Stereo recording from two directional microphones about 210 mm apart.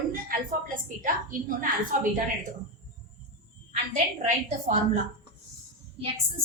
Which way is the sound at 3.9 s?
35° right (ahead or behind).